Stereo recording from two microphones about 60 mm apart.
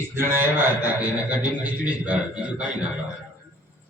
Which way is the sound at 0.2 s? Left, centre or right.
Right.